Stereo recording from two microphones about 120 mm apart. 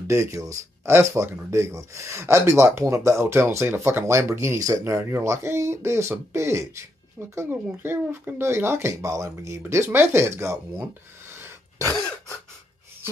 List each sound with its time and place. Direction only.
0.1 s speech: 25° right (ahead or behind)